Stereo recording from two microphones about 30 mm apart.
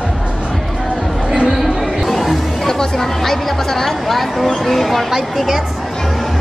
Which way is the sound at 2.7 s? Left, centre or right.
Centre.